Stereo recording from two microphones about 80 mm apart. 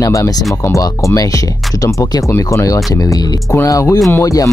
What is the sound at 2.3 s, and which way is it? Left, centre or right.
Speech, left.